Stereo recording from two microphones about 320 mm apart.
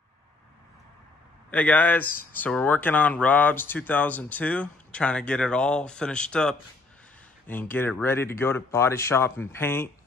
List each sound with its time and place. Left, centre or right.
1.5 s speech: centre